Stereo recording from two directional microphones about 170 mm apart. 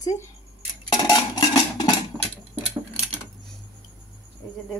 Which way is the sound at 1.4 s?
30° left (ahead or behind).